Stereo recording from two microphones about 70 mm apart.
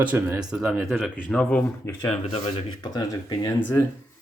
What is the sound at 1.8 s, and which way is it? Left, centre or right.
Speech, left.